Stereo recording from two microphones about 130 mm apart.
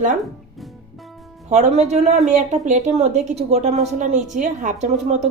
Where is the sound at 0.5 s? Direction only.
Centre (ahead or behind).